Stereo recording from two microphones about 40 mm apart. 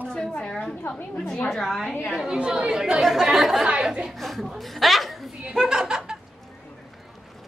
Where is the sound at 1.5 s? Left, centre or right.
Centre.